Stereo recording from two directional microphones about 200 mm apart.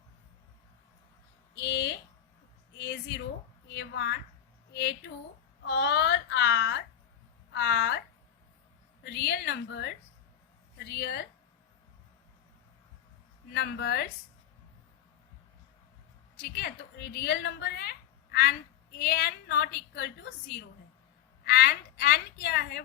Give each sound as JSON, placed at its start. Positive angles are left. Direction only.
{"t": 1.5, "sound": "a sound", "side_deg": 60}
{"t": 2.7, "sound": "a woman's voice", "side_deg": 55}
{"t": 9.0, "sound": "a woman's voice", "side_deg": 55}
{"t": 13.5, "sound": "a woman's voice", "side_deg": 55}
{"t": 16.4, "sound": "a woman's voice", "side_deg": 55}